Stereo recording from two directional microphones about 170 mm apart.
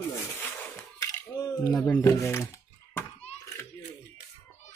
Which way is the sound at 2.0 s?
15° left (ahead or behind).